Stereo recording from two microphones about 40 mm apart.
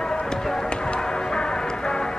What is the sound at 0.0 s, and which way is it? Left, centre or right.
Music, centre.